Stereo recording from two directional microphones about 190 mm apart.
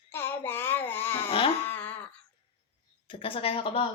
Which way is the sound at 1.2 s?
30° left (ahead or behind).